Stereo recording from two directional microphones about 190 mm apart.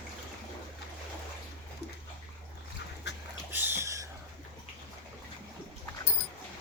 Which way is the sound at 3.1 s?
65° left (ahead or behind).